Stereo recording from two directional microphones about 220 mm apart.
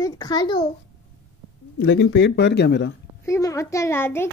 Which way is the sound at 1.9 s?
55° left (ahead or behind).